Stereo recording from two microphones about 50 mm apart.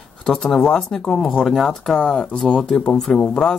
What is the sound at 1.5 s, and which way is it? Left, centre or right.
Speech, centre.